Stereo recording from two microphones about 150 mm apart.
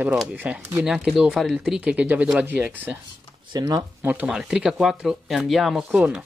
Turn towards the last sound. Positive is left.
turn(degrees=-5)  # may be behind; listen again after turning